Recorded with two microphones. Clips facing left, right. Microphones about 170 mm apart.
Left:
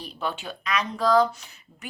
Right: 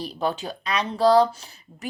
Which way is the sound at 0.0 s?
35° right (ahead or behind).